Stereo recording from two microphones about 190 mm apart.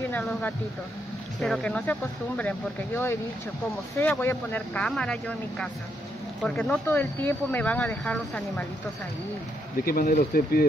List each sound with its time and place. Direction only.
0.1 s speech: 5° left (ahead or behind)
9.8 s speech: 50° left (ahead or behind)